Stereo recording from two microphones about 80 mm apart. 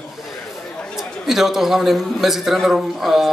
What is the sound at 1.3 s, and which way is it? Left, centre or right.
Mantra, centre.